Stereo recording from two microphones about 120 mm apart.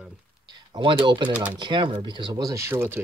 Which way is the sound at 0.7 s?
45° right (ahead or behind).